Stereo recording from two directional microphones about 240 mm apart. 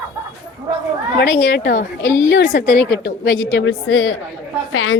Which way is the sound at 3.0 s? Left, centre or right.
Left.